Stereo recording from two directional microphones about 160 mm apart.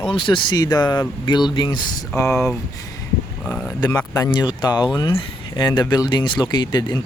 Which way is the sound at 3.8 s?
25° left (ahead or behind).